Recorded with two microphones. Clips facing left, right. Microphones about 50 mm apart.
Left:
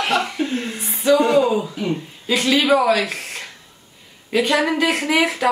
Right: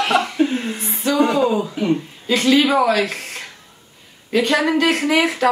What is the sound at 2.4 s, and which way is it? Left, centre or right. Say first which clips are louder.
Speech: right 1 dB; centre.